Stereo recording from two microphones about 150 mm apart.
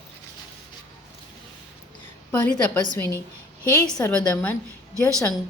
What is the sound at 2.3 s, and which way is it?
A woman's voice, 10° left (ahead or behind).